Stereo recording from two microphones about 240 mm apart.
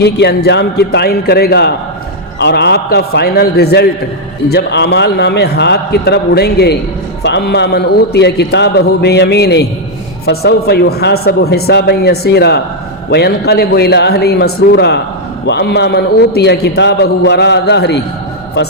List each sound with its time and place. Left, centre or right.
0.0 s a man's voice: left